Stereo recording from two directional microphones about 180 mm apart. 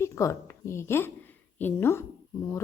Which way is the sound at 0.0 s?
15° left (ahead or behind).